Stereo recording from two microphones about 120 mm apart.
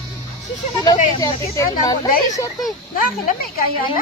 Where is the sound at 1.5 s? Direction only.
30° left (ahead or behind).